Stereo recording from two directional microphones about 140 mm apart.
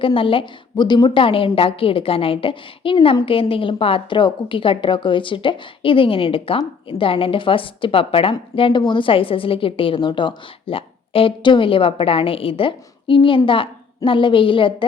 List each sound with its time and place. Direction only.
0.0 s a woman's voice: 40° left (ahead or behind)